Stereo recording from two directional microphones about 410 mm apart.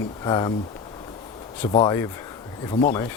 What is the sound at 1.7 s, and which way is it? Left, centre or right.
Speech, centre.